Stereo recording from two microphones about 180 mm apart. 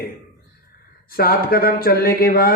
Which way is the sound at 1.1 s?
55° left (ahead or behind).